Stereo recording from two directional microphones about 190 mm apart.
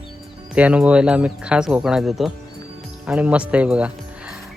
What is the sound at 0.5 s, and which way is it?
Speech, 5° right (ahead or behind).